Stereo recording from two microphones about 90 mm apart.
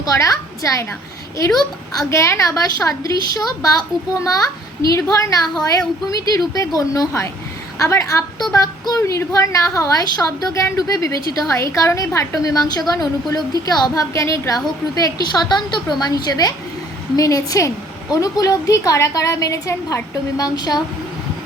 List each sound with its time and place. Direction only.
0.0 s a woman's voice: 35° left (ahead or behind)